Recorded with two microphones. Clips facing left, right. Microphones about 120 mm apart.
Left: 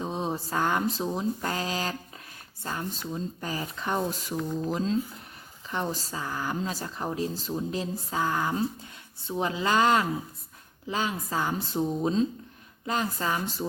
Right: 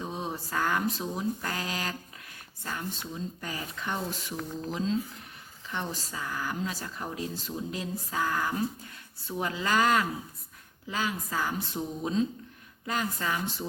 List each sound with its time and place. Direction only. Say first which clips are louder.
0.0 s speech: left 4 dB; 30° left (ahead or behind)